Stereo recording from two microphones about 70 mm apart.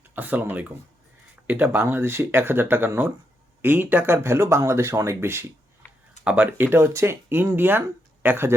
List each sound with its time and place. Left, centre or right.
0.1 s speech: right
5.8 s a sound: left
6.2 s speech: centre
6.6 s speech: right